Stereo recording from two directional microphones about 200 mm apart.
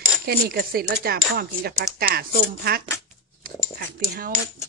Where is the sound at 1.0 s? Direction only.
50° right (ahead or behind).